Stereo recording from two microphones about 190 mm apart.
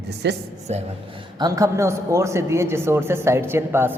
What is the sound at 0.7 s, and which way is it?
Speech, 35° right (ahead or behind).